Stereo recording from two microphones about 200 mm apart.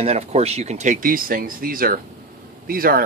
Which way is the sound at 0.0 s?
30° right (ahead or behind).